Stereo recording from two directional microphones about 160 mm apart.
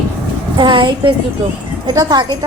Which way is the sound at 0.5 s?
30° right (ahead or behind).